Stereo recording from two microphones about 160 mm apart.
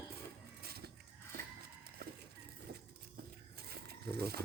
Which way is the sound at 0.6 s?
80° right.